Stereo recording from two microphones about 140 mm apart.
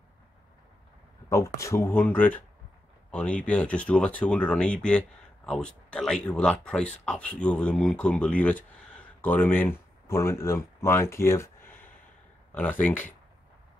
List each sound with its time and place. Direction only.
1.3 s speech: 20° left (ahead or behind)